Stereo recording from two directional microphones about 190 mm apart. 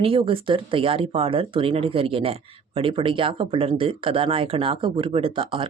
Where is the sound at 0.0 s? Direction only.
30° right (ahead or behind).